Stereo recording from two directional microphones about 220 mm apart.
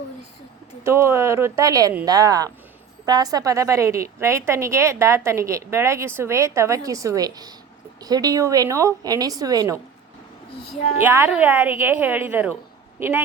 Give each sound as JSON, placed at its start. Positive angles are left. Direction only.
{"t": 0.9, "sound": "a woman's voice", "side_deg": -10}
{"t": 11.0, "sound": "a woman's voice", "side_deg": -10}